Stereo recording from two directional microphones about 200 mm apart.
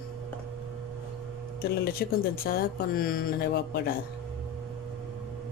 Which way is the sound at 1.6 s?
50° left (ahead or behind).